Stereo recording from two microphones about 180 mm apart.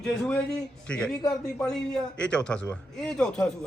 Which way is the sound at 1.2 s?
20° left (ahead or behind).